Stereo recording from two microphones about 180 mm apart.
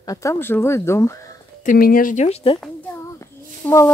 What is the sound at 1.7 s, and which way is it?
Speech, 50° left (ahead or behind).